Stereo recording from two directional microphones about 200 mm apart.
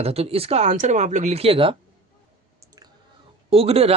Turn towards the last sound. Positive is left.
turn(degrees=-30)  # may be behind; listen again after turning